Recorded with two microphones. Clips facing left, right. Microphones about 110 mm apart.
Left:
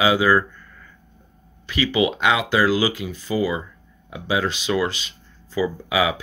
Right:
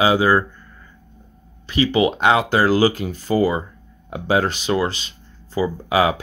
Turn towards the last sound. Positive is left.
turn(degrees=-45)  # may be behind; listen again after turning